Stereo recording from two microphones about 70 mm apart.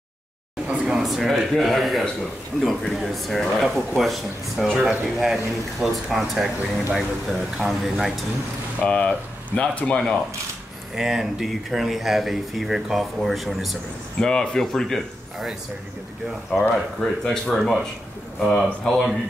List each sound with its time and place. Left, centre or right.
0.7 s a sound: centre
1.0 s speech: centre
8.8 s speech: centre
11.0 s speech: centre
14.2 s speech: centre
16.5 s speech: centre